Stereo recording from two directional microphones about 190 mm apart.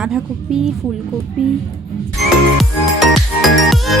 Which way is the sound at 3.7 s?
Centre (ahead or behind).